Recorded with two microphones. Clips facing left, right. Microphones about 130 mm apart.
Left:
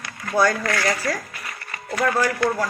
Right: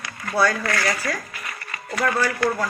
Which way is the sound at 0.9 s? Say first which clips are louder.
Left 2 dB; 30° left (ahead or behind).